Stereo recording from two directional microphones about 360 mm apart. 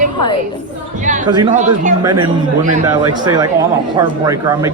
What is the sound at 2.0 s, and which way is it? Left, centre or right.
Speech, centre.